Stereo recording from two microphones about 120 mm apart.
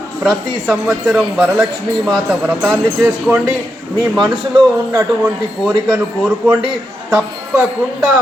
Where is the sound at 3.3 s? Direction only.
5° right (ahead or behind).